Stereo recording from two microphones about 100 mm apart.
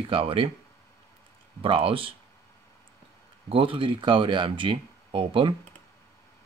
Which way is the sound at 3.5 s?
60° right (ahead or behind).